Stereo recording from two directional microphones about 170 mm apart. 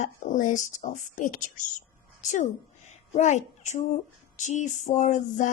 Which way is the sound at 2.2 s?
45° left (ahead or behind).